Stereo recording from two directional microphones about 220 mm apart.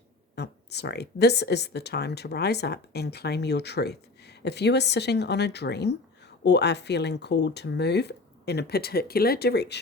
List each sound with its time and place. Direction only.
0.3 s speech: 50° left (ahead or behind)